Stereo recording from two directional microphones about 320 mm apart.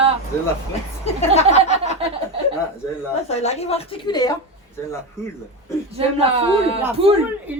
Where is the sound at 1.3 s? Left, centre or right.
Centre.